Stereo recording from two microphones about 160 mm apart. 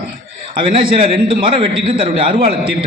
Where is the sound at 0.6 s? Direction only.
30° right (ahead or behind).